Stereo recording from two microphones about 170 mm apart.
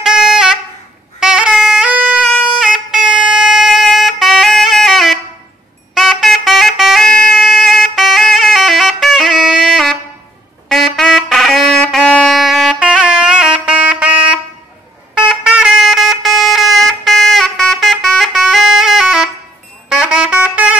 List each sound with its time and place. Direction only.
0.0 s wind instrument: 5° right (ahead or behind)
1.2 s music: 5° right (ahead or behind)
15.4 s a sound: 5° right (ahead or behind)
20.0 s music: 5° right (ahead or behind)